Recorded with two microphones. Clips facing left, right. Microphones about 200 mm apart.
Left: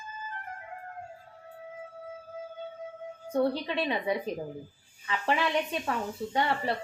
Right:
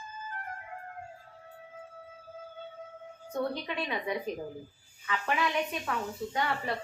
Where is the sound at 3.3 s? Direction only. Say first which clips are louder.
Left 5 dB; 30° left (ahead or behind).